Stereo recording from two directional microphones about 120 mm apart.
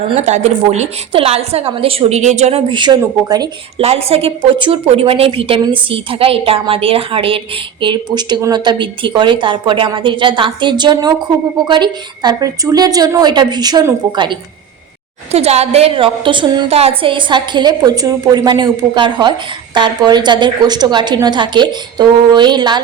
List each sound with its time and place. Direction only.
0.2 s a woman's voice: 70° right (ahead or behind)
2.7 s a woman's voice: 40° right (ahead or behind)
3.8 s a woman's voice: 55° right (ahead or behind); by 13.8 s 35° right (ahead or behind)
15.3 s a woman's voice: 60° right (ahead or behind); by 16.6 s 40° right (ahead or behind)
16.6 s a woman's voice: 55° right (ahead or behind); by 22.8 s 35° right (ahead or behind)